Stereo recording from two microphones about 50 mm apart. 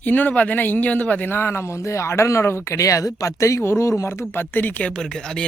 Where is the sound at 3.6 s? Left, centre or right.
Left.